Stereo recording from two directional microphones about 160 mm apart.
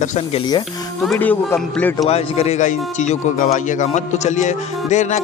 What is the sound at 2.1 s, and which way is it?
Speech, 40° left (ahead or behind).